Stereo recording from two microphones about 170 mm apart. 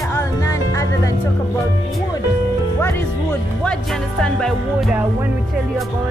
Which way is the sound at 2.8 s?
10° left (ahead or behind).